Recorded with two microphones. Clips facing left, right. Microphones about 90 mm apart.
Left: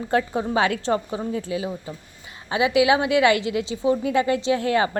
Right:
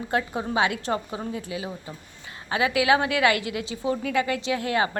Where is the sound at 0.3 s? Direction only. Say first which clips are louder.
Left 3 dB; 35° left (ahead or behind).